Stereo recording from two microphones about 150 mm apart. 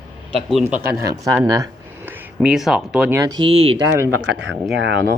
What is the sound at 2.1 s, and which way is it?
Speech, 5° right (ahead or behind).